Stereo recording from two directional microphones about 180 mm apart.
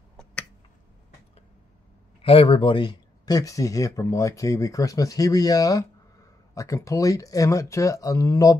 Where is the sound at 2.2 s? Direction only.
30° left (ahead or behind).